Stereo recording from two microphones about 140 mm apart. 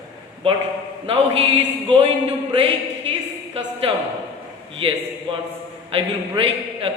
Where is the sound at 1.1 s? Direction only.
45° right (ahead or behind).